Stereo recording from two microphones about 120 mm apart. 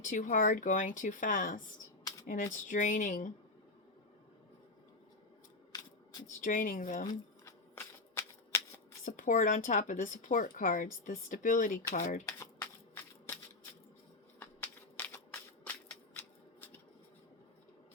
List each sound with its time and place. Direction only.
0.0 s speech: 90° left
5.7 s a sound: 30° left (ahead or behind)
6.2 s speech: 90° left
7.1 s shuffling cards: 25° left (ahead or behind)
9.0 s speech: 90° left
12.2 s shuffling cards: 20° left (ahead or behind)
14.3 s crushing: 15° left (ahead or behind)